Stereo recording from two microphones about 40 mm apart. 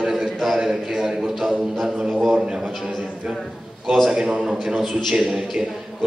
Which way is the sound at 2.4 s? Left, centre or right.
Right.